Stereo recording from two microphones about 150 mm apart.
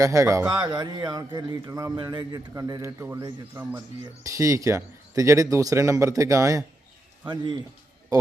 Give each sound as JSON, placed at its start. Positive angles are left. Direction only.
{"t": 0.0, "sound": "a man's voice", "side_deg": -20}